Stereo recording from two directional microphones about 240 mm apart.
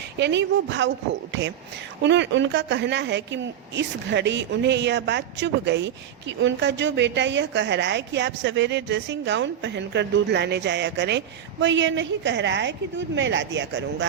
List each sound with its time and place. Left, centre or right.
0.2 s speech: right